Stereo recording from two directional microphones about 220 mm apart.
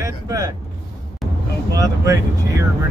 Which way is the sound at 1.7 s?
15° right (ahead or behind).